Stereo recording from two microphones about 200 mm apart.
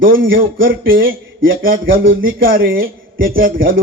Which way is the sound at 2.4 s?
45° right (ahead or behind).